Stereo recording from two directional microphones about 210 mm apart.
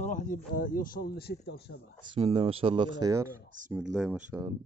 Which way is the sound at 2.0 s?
25° right (ahead or behind).